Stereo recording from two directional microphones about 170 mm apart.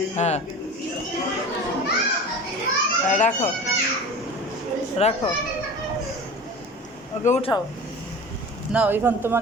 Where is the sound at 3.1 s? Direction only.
45° left (ahead or behind).